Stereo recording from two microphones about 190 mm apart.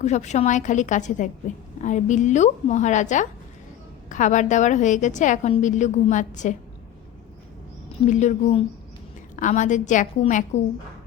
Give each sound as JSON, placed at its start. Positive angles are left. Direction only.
{"t": 0.0, "sound": "a woman's voice", "side_deg": 40}
{"t": 8.0, "sound": "a woman's voice", "side_deg": 40}